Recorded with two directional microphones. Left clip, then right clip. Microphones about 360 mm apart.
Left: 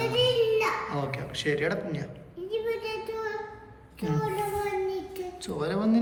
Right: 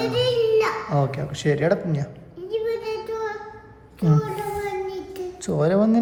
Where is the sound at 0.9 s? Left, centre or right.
Centre.